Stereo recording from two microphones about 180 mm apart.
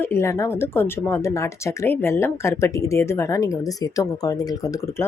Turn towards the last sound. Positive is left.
turn(degrees=20)  # may be behind; listen again after turning